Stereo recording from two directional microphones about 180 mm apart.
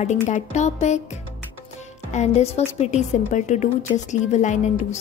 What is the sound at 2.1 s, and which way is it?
Speech, 35° left (ahead or behind).